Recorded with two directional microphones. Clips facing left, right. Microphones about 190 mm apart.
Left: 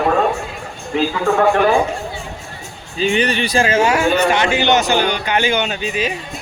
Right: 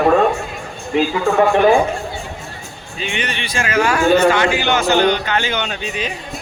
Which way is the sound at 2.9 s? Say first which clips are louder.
Left 8 dB; 35° left (ahead or behind).